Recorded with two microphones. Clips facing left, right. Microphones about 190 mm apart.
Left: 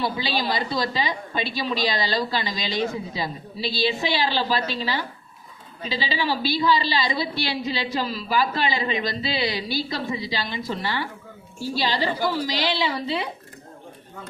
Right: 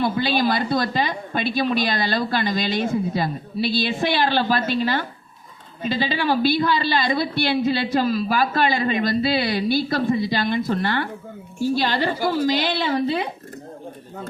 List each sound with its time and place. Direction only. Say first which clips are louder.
0.0 s a woman's voice: right 5 dB; 50° right (ahead or behind)